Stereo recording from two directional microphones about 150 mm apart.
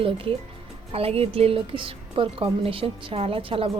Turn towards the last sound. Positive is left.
turn(degrees=-40)  # may be behind; listen again after turning